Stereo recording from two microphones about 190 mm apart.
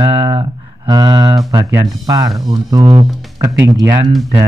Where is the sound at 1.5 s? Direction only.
20° right (ahead or behind).